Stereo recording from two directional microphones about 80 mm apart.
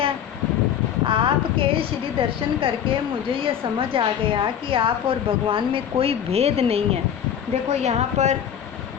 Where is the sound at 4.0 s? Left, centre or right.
Right.